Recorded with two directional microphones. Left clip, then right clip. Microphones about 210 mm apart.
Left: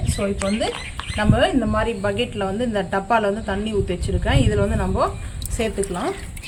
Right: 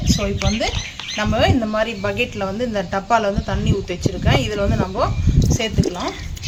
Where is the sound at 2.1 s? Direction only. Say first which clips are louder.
Right 1 dB; 5° left (ahead or behind).